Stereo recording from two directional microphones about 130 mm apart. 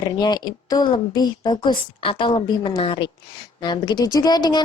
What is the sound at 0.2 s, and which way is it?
Speech, 35° left (ahead or behind).